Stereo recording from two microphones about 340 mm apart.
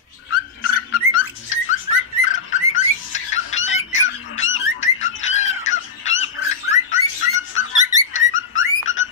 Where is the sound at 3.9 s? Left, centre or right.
Left.